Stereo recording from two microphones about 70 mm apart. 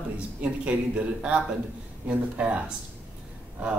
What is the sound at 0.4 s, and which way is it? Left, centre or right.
Speech, centre.